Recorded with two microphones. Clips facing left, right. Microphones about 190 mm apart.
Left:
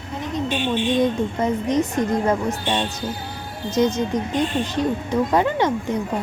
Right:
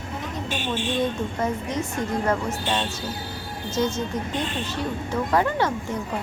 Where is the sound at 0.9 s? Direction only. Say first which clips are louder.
Left 5 dB; 20° left (ahead or behind).